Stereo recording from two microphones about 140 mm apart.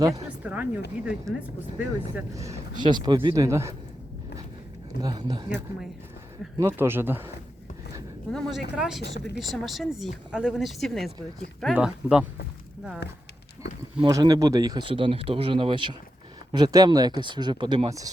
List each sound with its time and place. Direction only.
0.4 s speech: 10° right (ahead or behind)
2.3 s speech: 25° right (ahead or behind)
5.0 s speech: 30° right (ahead or behind)
6.6 s speech: 20° right (ahead or behind)
8.3 s speech: centre (ahead or behind)
14.0 s speech: 25° right (ahead or behind)